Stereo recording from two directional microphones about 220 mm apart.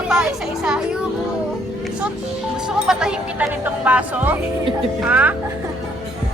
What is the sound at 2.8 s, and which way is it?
Speech, 5° right (ahead or behind).